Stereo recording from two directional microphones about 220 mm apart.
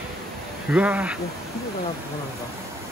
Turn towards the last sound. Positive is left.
turn(degrees=-5)  # may be behind; listen again after turning